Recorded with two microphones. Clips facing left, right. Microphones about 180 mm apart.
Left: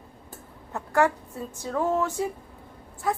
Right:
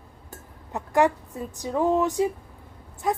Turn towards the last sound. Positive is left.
turn(degrees=-20)  # may be behind; listen again after turning